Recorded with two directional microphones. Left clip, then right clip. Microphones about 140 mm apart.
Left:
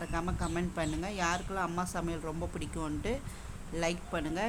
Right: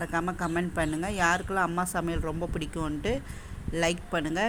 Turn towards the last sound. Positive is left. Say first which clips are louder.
# right 6 dB
turn(degrees=-20)  # may be behind; listen again after turning